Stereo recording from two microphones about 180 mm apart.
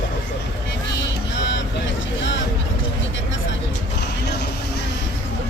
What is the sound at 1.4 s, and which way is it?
Vehicle, 90° left.